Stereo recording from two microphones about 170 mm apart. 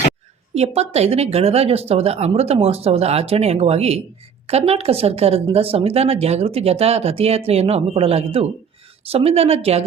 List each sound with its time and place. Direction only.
0.5 s speech: 40° right (ahead or behind)